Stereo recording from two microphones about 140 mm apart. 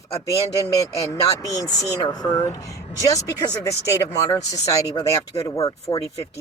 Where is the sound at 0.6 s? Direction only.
25° left (ahead or behind).